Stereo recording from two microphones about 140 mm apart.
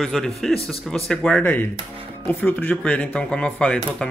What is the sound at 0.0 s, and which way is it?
A man's voice, centre (ahead or behind).